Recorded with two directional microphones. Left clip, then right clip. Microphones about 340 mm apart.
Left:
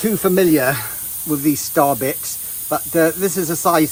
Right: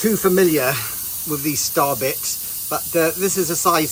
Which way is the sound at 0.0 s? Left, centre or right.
Left.